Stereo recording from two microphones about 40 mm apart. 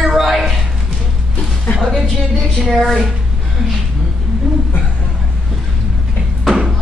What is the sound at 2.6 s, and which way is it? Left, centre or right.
Speech, centre.